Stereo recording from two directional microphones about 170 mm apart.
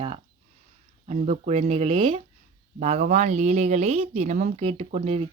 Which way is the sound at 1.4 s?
40° right (ahead or behind).